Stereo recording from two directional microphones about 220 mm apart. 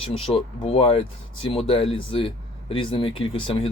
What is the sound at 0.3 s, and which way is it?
Speech, 30° left (ahead or behind).